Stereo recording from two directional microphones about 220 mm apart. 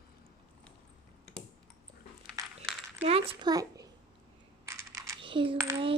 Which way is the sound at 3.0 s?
25° right (ahead or behind).